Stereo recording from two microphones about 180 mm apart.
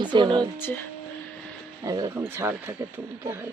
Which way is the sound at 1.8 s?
20° right (ahead or behind).